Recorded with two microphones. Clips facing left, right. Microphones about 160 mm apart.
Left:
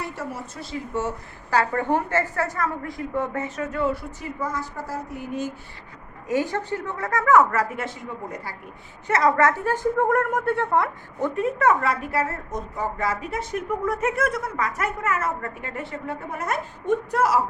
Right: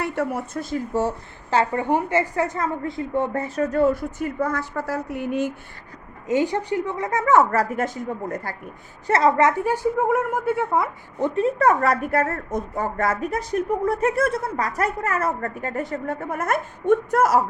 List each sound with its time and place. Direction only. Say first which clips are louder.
0.0 s a woman's voice: right 7 dB; 60° right (ahead or behind)
1.0 s a woman's voice: right 4 dB; 25° right (ahead or behind); by 5.5 s 70° right (ahead or behind)
6.2 s a woman's voice: right 3 dB; 20° right (ahead or behind); by 8.5 s 45° right (ahead or behind)
9.0 s a woman's voice: right 2 dB; 30° right (ahead or behind); by 10.8 s 5° right (ahead or behind)
11.2 s a woman's voice: right 3 dB; 30° right (ahead or behind); by 17.4 s 45° right (ahead or behind)